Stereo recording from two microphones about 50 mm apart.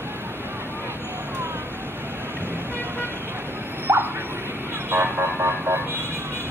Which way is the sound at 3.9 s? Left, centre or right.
Right.